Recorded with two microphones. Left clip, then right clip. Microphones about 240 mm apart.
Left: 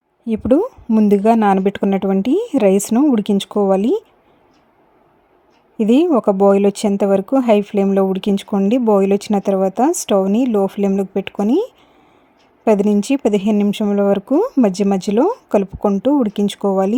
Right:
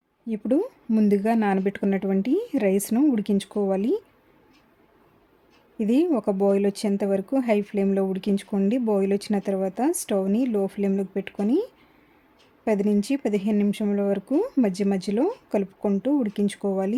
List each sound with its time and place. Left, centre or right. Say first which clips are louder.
0.3 s speech: left 9 dB; left
5.7 s speech: left 9 dB; left
12.6 s speech: left 9 dB; left